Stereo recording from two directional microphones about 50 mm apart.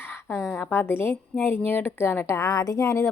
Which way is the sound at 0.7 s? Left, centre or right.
Left.